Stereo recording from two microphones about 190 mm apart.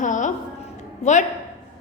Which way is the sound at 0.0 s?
40° left (ahead or behind).